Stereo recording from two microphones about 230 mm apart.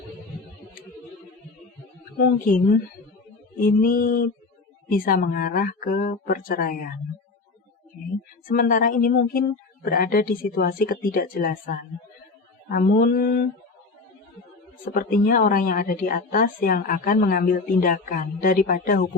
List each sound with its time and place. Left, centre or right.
2.1 s a woman's voice: left
8.4 s a woman's voice: left
14.9 s a woman's voice: left